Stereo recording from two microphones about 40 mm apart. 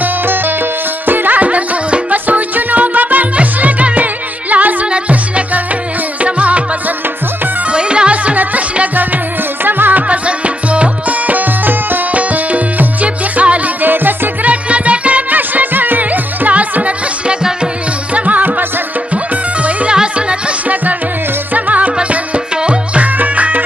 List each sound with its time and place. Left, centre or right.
0.0 s music: right
7.7 s music: right
9.7 s music: right
10.0 s music: right
13.8 s music: right
14.4 s music: right
15.3 s music: right
19.9 s music: right
21.5 s music: right